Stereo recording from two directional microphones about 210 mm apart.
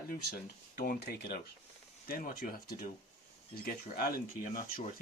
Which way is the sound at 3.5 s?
45° left (ahead or behind).